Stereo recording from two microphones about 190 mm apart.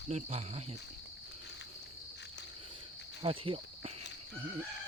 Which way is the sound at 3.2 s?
30° right (ahead or behind).